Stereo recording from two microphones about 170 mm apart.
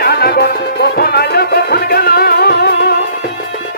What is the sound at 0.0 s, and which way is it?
Music, 65° left (ahead or behind).